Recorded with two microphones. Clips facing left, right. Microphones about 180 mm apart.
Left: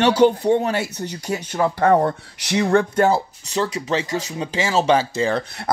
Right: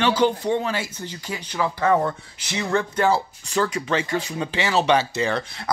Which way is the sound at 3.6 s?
30° left (ahead or behind).